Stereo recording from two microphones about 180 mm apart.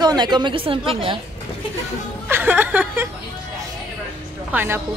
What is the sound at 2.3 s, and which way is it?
Speech, 10° right (ahead or behind).